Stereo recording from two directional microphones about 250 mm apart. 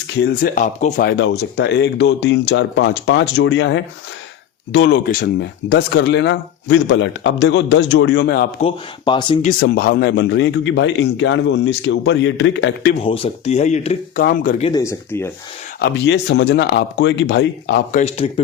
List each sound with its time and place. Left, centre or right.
0.1 s speech: left
8.6 s speech: centre; by 12.9 s left
12.9 s speech: left
14.7 s speech: centre
15.8 s speech: left
17.9 s speech: left